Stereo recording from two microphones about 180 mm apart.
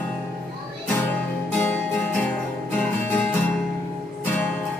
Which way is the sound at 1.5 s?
10° left (ahead or behind).